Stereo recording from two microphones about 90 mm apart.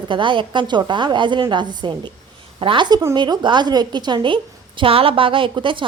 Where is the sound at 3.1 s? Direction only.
55° right (ahead or behind).